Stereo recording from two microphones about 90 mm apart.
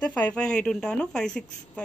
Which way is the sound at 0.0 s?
10° left (ahead or behind).